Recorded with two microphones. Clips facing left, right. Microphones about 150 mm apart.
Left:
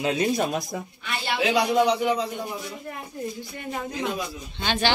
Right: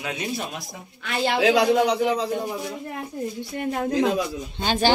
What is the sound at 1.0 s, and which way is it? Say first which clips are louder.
Speech: right 6 dB; 90° right.